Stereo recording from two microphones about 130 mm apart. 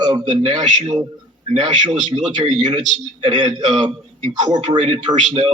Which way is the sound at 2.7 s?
65° right (ahead or behind).